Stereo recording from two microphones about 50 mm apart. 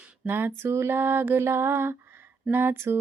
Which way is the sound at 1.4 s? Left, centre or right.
Right.